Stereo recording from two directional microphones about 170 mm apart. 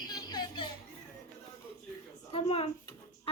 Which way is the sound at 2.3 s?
35° left (ahead or behind).